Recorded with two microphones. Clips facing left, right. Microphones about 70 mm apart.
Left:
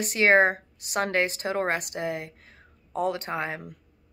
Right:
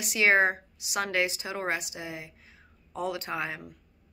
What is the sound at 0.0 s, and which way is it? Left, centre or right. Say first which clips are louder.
A woman's voice: left 3 dB; left.